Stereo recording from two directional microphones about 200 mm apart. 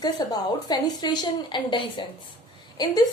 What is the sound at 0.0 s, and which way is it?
A woman's voice, 20° left (ahead or behind).